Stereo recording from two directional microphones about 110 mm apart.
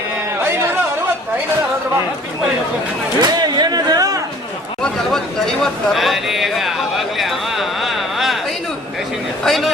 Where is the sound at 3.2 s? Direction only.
40° right (ahead or behind).